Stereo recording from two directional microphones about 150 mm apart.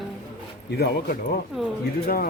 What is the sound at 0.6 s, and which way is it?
Speech, 90° left.